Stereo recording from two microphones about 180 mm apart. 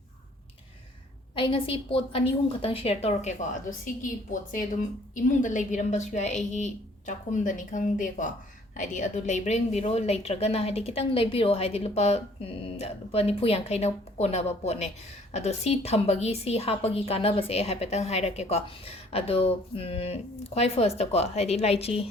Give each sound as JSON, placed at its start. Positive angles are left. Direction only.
{"t": 1.4, "sound": "a woman's voice", "side_deg": 30}
{"t": 5.1, "sound": "a woman's voice", "side_deg": 45}